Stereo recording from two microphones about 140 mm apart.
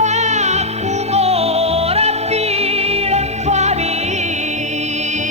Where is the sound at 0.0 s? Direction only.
55° right (ahead or behind).